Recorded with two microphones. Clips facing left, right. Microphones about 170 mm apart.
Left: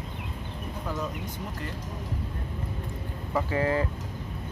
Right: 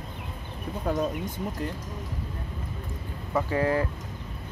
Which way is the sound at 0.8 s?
55° right (ahead or behind).